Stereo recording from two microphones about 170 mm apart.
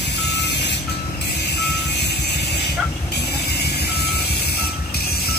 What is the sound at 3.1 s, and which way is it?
Reversing beeps, 75° left (ahead or behind).